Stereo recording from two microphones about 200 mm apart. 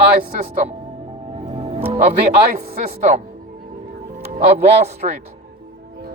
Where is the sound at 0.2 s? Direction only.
45° right (ahead or behind).